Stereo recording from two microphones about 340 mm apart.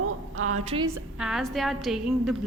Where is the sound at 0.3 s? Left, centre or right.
Right.